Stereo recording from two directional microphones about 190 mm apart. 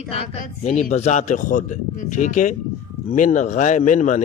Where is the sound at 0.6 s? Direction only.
35° left (ahead or behind).